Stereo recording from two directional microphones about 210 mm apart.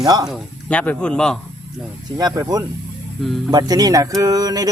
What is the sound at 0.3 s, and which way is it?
Speech, 5° left (ahead or behind).